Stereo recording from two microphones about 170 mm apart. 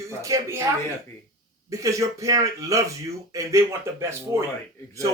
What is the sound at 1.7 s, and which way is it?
Speech, 20° right (ahead or behind).